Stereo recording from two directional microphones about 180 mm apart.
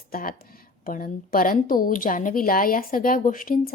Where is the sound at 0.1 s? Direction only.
50° left (ahead or behind).